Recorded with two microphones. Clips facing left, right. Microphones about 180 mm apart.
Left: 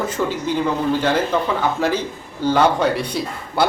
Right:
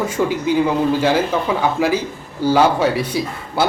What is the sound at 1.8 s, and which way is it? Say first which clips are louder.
Speech: right 2 dB; 10° right (ahead or behind).